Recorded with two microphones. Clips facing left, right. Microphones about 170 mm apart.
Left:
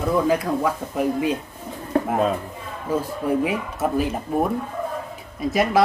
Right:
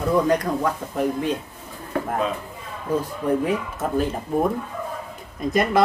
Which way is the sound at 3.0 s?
10° left (ahead or behind).